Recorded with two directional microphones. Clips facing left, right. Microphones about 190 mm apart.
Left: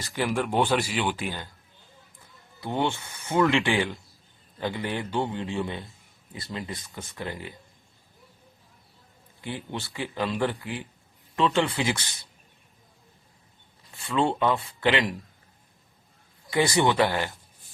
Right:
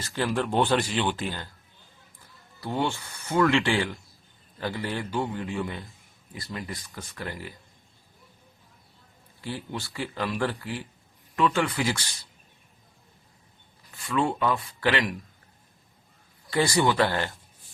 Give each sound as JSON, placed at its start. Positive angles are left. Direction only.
{"t": 0.0, "sound": "speech", "side_deg": 15}
{"t": 2.6, "sound": "speech", "side_deg": 20}
{"t": 9.4, "sound": "speech", "side_deg": 20}
{"t": 13.9, "sound": "speech", "side_deg": 25}
{"t": 16.5, "sound": "speech", "side_deg": 20}